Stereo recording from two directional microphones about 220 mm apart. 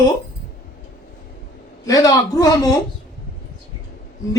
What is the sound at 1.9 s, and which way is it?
Speech, 15° left (ahead or behind).